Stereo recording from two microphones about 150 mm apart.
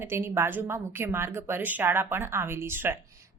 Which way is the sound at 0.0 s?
15° right (ahead or behind).